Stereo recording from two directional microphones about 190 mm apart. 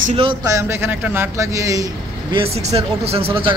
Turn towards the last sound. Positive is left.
turn(degrees=-30)  # may be behind; listen again after turning